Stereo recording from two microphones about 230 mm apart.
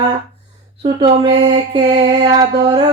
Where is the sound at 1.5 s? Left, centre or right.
Right.